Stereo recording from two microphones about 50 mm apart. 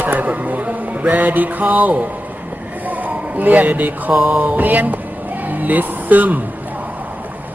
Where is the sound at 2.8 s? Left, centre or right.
Right.